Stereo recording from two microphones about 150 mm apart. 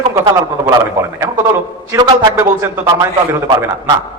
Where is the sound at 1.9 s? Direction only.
30° right (ahead or behind).